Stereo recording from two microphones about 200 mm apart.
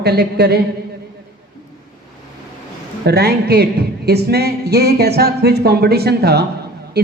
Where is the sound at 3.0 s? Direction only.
55° right (ahead or behind).